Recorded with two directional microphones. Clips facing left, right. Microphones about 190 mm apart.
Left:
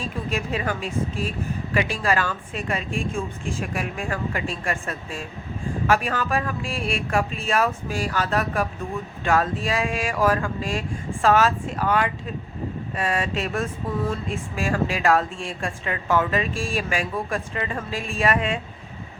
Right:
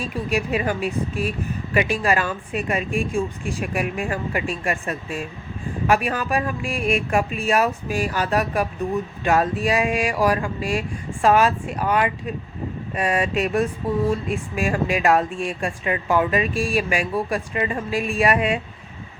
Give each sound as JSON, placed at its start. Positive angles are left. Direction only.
{"t": 0.0, "sound": "speech", "side_deg": -15}